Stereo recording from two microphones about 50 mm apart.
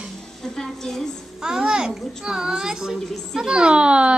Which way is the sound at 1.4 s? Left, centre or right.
Centre.